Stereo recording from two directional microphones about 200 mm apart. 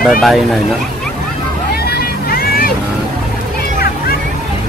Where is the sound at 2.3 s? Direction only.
50° left (ahead or behind).